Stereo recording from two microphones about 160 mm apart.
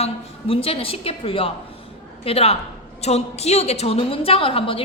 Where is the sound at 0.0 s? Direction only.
35° left (ahead or behind).